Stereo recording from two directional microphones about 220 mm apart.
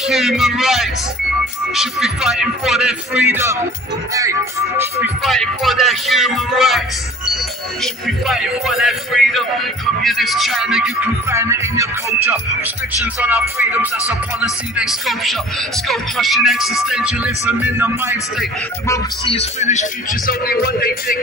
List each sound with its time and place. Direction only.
0.0 s speech: centre (ahead or behind)
5.0 s speech: centre (ahead or behind)
7.8 s speech: centre (ahead or behind)
13.0 s speech: 10° right (ahead or behind)
18.9 s speech: 25° left (ahead or behind)
20.2 s speech: 45° left (ahead or behind)